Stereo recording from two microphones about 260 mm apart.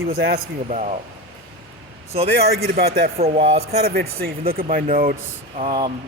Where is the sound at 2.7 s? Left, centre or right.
Right.